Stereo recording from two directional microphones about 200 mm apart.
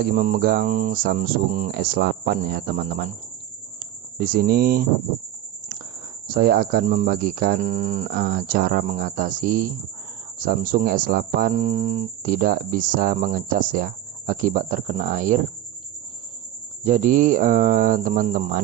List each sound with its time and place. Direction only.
0.0 s speech: 45° right (ahead or behind)
6.2 s speech: 45° right (ahead or behind)
7.6 s speech: 35° right (ahead or behind)
8.1 s speech: 50° right (ahead or behind)
11.5 s speech: 35° right (ahead or behind)
16.8 s speech: 40° right (ahead or behind)